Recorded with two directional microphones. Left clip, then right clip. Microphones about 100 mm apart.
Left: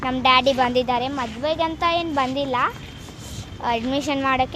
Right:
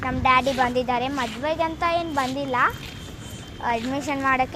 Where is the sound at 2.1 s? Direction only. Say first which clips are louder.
Left 3 dB; 60° left (ahead or behind).